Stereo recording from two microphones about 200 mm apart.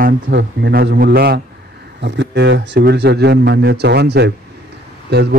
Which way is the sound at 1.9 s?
60° right (ahead or behind).